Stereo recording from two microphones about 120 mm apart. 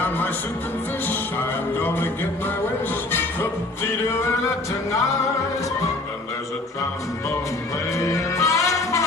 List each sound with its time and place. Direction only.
4.1 s music: 20° left (ahead or behind)
7.9 s music: 25° left (ahead or behind)